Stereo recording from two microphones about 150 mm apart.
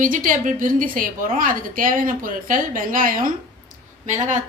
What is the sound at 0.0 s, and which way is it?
A woman's voice, 60° right (ahead or behind).